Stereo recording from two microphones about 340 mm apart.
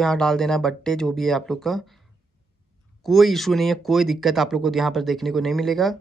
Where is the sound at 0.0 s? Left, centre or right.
Centre.